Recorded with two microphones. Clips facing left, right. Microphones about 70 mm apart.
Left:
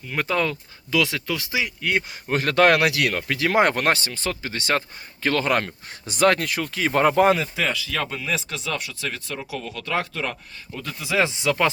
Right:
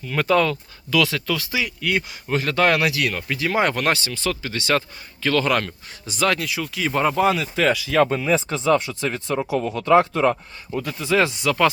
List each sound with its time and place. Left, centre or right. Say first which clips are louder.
0.1 s speech: right 5 dB; centre; by 2.3 s left
2.3 s speech: left 2 dB; left
3.6 s speech: left 1 dB; left
6.1 s speech: left 3 dB; left
7.6 s speech: right 6 dB; centre
8.0 s speech: right 8 dB; right
10.8 s speech: right 4 dB; centre
11.2 s speech: right 1 dB; left